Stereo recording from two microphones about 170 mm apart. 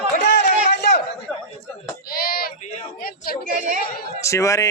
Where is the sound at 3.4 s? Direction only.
55° right (ahead or behind).